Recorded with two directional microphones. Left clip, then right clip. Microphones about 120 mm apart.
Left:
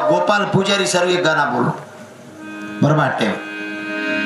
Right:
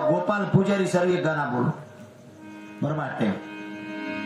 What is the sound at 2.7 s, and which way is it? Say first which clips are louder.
Speech: left 12 dB; 25° left (ahead or behind).